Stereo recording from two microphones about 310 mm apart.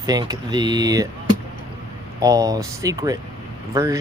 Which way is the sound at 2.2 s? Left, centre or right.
Centre.